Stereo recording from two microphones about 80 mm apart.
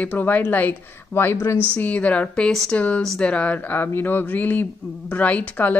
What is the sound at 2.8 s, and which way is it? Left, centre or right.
A woman's voice, centre.